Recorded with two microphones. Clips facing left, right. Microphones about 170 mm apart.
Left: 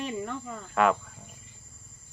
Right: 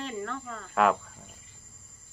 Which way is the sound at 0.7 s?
Centre (ahead or behind).